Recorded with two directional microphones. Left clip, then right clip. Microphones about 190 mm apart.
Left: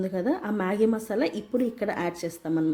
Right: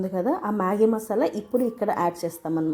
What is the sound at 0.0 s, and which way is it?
A woman's voice, 25° left (ahead or behind).